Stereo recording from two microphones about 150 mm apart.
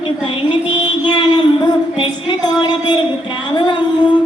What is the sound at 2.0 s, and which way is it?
Female singing, 30° left (ahead or behind).